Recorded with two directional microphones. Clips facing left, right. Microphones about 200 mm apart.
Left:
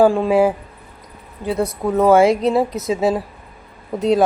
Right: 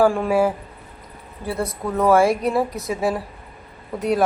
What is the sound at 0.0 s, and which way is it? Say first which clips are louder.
A woman's voice: left 4 dB; 20° left (ahead or behind).